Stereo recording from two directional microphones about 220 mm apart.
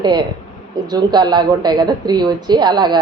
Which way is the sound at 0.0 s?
20° right (ahead or behind).